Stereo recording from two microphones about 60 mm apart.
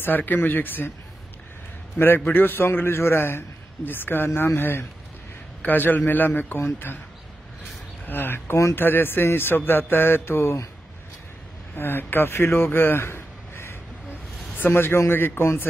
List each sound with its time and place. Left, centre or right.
0.0 s a man's voice: left
2.0 s a man's voice: left
8.0 s a man's voice: left
11.7 s a man's voice: left